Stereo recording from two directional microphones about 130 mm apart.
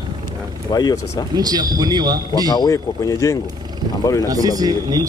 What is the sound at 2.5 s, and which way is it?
Speech, 30° left (ahead or behind).